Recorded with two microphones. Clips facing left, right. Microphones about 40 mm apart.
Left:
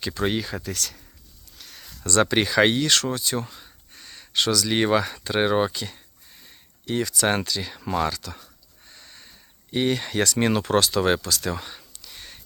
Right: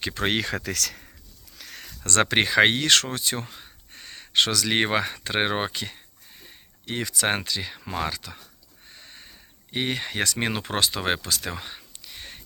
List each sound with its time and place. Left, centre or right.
0.0 s speech: right
0.3 s speech: right
1.8 s speech: right
3.4 s speech: right
8.9 s a sound: right
9.7 s speech: centre
11.9 s a sound: right